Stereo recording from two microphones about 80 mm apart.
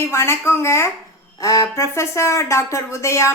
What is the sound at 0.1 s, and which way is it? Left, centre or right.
Speech, left.